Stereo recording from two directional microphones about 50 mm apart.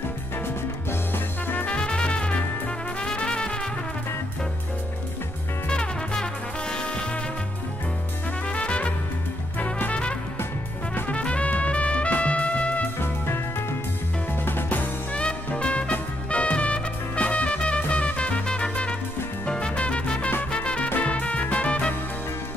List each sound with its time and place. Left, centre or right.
1.1 s music: left
1.7 s music: centre
5.7 s music: centre
8.5 s music: left
13.0 s music: left
14.4 s music: left
15.1 s music: left